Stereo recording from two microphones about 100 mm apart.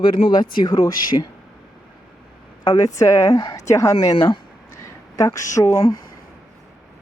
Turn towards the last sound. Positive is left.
turn(degrees=35)  # may be behind; listen again after turning